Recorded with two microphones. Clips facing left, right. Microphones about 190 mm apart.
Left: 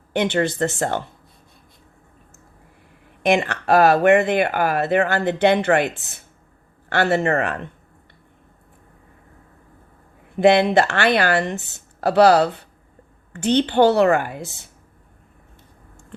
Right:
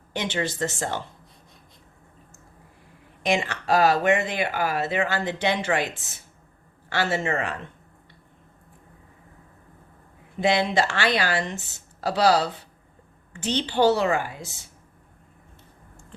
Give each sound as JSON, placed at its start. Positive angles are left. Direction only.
{"t": 0.1, "sound": "speech", "side_deg": 60}
{"t": 3.2, "sound": "speech", "side_deg": 60}
{"t": 10.3, "sound": "speech", "side_deg": 60}